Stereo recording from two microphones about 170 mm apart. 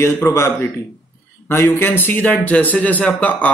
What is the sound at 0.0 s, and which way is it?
Speech, 15° left (ahead or behind).